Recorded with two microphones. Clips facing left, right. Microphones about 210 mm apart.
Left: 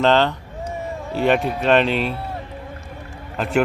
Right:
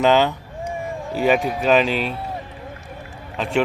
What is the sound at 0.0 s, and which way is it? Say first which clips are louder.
Speech: even; 5° right (ahead or behind).